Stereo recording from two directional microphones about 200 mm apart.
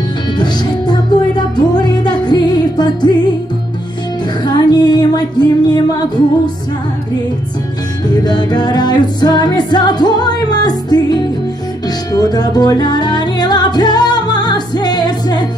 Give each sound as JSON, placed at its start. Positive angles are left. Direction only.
{"t": 0.4, "sound": "music", "side_deg": 20}
{"t": 4.5, "sound": "music", "side_deg": 20}
{"t": 8.1, "sound": "music", "side_deg": 20}